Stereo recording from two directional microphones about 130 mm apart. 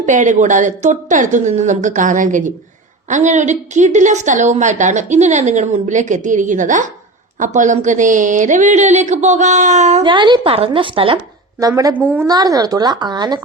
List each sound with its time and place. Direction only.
0.0 s a woman's voice: 70° right (ahead or behind)
10.0 s a woman's voice: 35° right (ahead or behind)
12.3 s a woman's voice: 30° right (ahead or behind)